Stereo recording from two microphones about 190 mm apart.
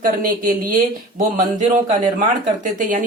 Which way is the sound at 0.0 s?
45° right (ahead or behind).